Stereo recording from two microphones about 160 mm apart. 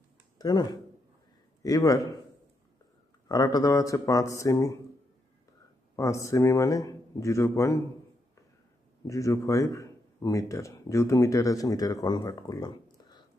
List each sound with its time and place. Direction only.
0.4 s a man's voice: 25° left (ahead or behind)
3.3 s a man's voice: 25° left (ahead or behind)
5.9 s a man's voice: 20° left (ahead or behind)
9.0 s a man's voice: 20° left (ahead or behind)